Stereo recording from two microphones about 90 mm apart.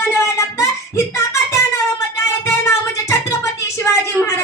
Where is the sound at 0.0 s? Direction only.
30° left (ahead or behind).